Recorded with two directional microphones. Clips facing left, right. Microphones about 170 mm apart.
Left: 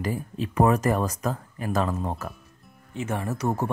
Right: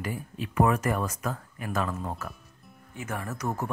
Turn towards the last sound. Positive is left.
turn(degrees=30)  # may be behind; listen again after turning